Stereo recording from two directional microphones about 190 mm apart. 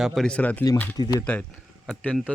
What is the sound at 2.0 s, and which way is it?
Speech, 5° left (ahead or behind).